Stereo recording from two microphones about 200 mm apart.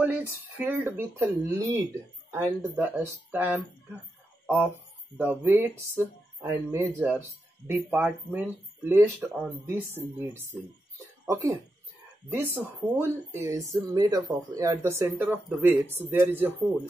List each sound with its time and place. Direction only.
0.0 s speech: 10° right (ahead or behind)
5.1 s speech: 10° right (ahead or behind)
7.0 s speech: 5° left (ahead or behind)
7.6 s speech: 10° right (ahead or behind)
12.9 s speech: 10° right (ahead or behind)